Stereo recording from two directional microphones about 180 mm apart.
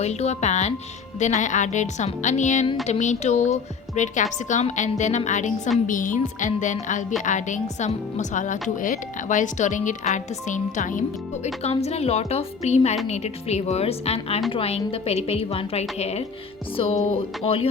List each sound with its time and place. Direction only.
0.0 s a woman's voice: 35° left (ahead or behind)